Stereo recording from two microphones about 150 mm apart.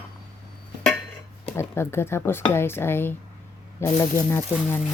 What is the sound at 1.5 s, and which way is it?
Speech, 15° left (ahead or behind).